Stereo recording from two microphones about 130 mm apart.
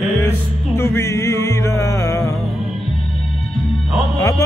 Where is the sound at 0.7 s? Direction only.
20° left (ahead or behind).